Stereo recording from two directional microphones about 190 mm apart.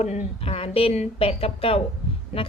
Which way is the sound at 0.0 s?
30° left (ahead or behind).